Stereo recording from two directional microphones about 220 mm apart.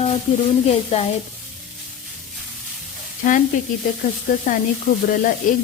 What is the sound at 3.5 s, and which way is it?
Speech, 35° left (ahead or behind).